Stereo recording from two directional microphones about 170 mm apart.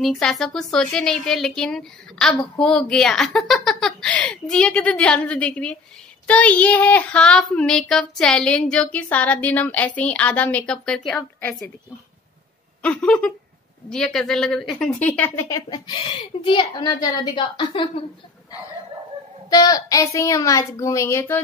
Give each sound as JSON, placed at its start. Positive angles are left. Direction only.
{"t": 0.0, "sound": "a child's voice", "side_deg": 0}
{"t": 12.8, "sound": "a child's voice", "side_deg": 5}
{"t": 15.7, "sound": "a woman's voice", "side_deg": 30}
{"t": 19.5, "sound": "a woman's voice", "side_deg": 20}